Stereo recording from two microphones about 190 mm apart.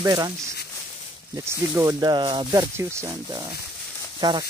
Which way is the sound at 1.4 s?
15° right (ahead or behind).